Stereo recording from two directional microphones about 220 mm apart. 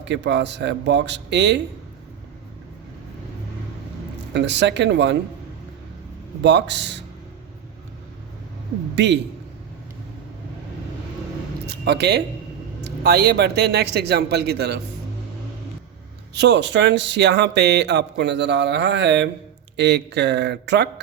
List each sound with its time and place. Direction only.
0.0 s speech: 55° right (ahead or behind)
4.4 s speech: 50° right (ahead or behind)
6.4 s speech: 50° right (ahead or behind)
9.0 s speech: 50° right (ahead or behind)
11.6 s a sound: 50° right (ahead or behind)
12.8 s speech: 50° right (ahead or behind)
16.3 s speech: 50° right (ahead or behind)